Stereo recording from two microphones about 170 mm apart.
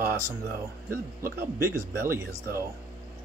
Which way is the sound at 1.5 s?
15° right (ahead or behind).